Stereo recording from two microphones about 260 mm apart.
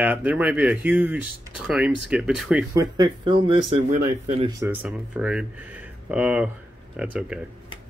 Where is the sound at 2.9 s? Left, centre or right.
Centre.